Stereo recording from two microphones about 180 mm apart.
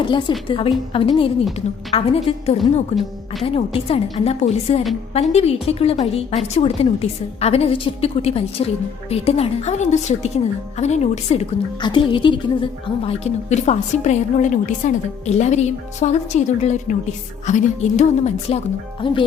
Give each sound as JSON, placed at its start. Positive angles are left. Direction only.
{"t": 0.1, "sound": "a woman's voice", "side_deg": 25}
{"t": 11.8, "sound": "a woman's voice", "side_deg": 25}